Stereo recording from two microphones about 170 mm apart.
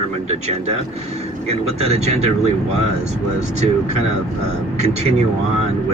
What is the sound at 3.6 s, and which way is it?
Speech, 40° right (ahead or behind).